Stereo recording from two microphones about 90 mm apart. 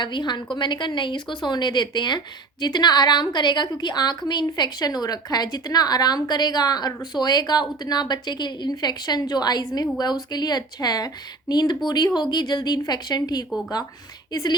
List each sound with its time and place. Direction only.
0.0 s a woman's voice: 60° left (ahead or behind)